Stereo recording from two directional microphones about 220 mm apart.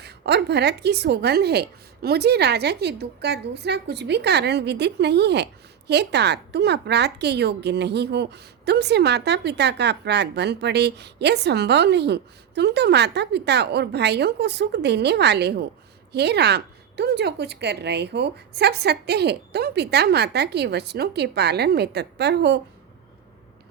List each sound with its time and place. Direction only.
0.0 s a woman's voice: 50° right (ahead or behind)